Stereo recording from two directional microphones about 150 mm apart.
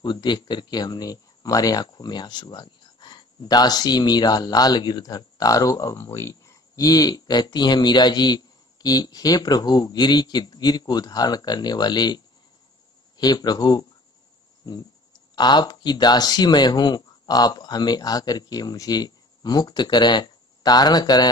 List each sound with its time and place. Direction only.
0.0 s speech: 30° left (ahead or behind)
13.2 s speech: 25° left (ahead or behind)